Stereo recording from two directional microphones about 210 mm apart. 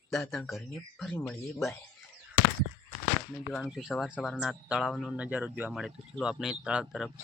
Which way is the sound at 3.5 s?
Centre (ahead or behind).